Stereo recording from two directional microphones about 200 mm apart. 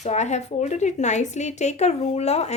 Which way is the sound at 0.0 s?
35° left (ahead or behind).